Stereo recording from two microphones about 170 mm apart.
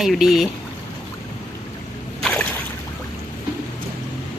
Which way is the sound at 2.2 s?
Centre (ahead or behind).